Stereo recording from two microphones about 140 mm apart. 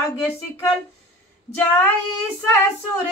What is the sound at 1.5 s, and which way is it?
Child singing, 15° left (ahead or behind).